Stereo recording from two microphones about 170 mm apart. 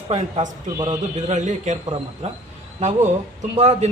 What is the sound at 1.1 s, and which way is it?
A man's voice, 45° right (ahead or behind).